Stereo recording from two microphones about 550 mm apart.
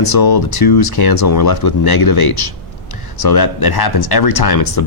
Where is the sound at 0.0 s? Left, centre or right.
Left.